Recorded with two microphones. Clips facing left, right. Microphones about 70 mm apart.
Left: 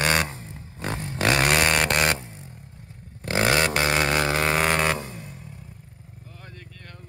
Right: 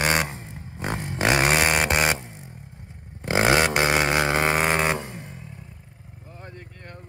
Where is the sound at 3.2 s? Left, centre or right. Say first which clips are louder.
Right 2 dB; right.